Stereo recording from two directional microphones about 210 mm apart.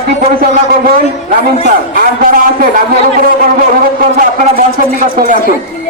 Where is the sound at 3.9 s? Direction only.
40° right (ahead or behind).